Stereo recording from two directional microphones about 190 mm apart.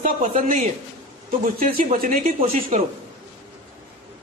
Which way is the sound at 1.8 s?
50° right (ahead or behind).